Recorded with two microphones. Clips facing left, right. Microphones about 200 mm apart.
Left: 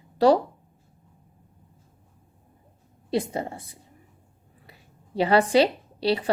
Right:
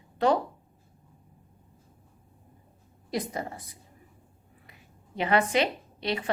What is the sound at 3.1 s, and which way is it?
Speech, 30° left (ahead or behind).